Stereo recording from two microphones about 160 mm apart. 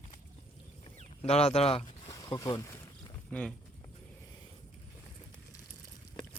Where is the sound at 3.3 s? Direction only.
5° left (ahead or behind).